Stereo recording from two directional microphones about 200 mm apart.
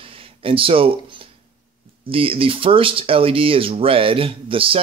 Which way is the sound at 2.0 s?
25° right (ahead or behind).